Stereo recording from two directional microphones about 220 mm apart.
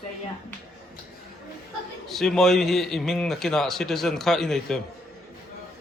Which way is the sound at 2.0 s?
Centre (ahead or behind).